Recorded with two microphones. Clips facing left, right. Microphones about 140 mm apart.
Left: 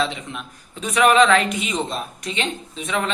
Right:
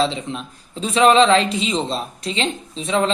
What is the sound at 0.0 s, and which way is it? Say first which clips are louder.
Speech: right 4 dB; 30° right (ahead or behind).